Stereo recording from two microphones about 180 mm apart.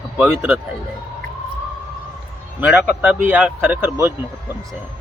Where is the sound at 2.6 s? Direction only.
10° right (ahead or behind).